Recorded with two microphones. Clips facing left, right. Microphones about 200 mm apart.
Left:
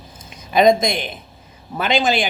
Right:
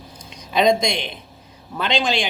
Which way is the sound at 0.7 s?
Centre (ahead or behind).